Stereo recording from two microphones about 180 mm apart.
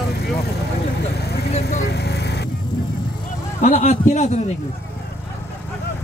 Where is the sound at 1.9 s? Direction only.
65° left (ahead or behind).